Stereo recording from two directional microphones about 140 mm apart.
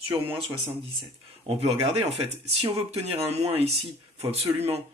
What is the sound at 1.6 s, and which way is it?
Speech, 50° right (ahead or behind).